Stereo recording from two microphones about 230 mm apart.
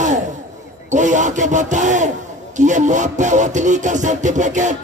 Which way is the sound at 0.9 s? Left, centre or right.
Right.